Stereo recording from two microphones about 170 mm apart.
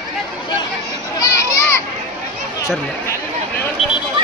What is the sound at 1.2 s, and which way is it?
Children playing, 20° left (ahead or behind).